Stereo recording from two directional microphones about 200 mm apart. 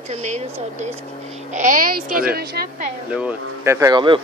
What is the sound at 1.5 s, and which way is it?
A woman's voice, 40° right (ahead or behind).